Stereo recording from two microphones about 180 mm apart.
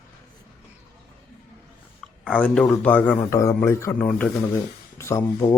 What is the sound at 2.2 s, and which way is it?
Speech, 5° left (ahead or behind).